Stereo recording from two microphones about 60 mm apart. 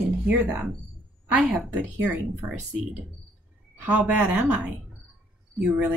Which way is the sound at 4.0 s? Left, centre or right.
Right.